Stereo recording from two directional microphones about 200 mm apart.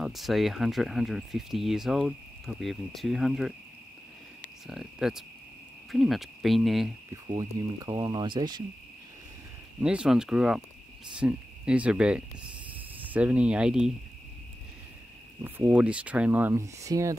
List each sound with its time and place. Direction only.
0.0 s speech: centre (ahead or behind)
4.6 s speech: centre (ahead or behind)
7.2 s speech: 20° right (ahead or behind)
9.8 s speech: 5° right (ahead or behind)
12.7 s cricket: 10° right (ahead or behind)
15.4 s speech: 10° right (ahead or behind)